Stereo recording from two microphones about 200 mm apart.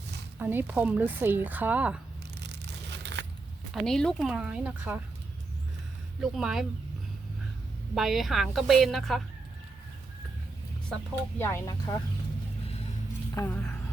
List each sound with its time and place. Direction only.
0.3 s speech: 10° right (ahead or behind)
3.2 s zipper: 60° right (ahead or behind)
3.7 s speech: centre (ahead or behind)
6.1 s speech: centre (ahead or behind)
7.9 s speech: centre (ahead or behind)
11.1 s speech: 10° left (ahead or behind)
13.3 s speech: 10° left (ahead or behind)